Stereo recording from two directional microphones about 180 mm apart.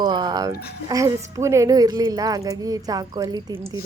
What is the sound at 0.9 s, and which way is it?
A woman's voice, 20° right (ahead or behind).